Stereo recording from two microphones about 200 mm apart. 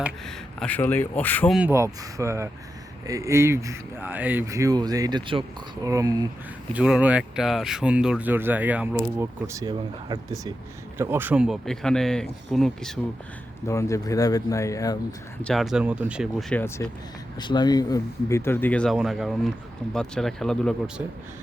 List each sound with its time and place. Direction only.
0.0 s speech: 5° left (ahead or behind)
1.5 s speech: 10° right (ahead or behind)
6.7 s speech: 5° right (ahead or behind)
13.7 s speech: 15° left (ahead or behind)
15.4 s speech: centre (ahead or behind)